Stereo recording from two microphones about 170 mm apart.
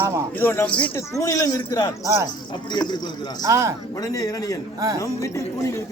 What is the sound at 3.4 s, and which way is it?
Speech, 20° right (ahead or behind).